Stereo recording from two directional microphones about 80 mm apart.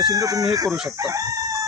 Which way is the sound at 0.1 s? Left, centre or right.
Right.